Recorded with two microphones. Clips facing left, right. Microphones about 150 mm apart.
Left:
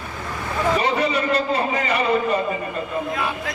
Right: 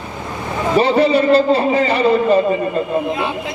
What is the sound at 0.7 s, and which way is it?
Speech, 30° right (ahead or behind).